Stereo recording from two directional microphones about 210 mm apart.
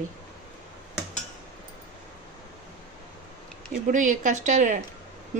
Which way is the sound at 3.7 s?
35° right (ahead or behind).